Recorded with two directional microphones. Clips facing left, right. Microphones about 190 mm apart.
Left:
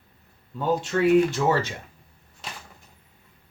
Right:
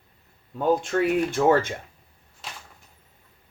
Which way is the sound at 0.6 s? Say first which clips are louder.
Even; 50° right (ahead or behind).